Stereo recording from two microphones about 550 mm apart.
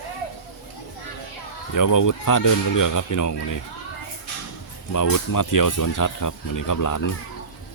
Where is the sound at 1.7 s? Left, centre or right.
Left.